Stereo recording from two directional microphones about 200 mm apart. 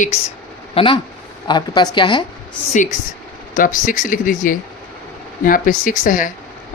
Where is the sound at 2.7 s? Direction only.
40° left (ahead or behind).